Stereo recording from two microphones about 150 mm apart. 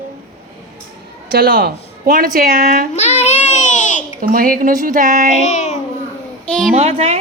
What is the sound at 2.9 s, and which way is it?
Babbling, 50° left (ahead or behind).